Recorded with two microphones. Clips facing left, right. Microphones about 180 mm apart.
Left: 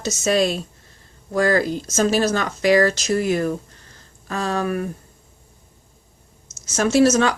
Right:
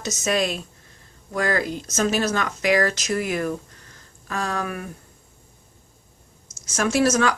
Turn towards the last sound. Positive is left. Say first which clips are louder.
# left 4 dB
turn(degrees=25)  # may be behind; listen again after turning